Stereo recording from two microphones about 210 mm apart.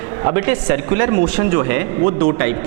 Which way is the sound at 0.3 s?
15° right (ahead or behind).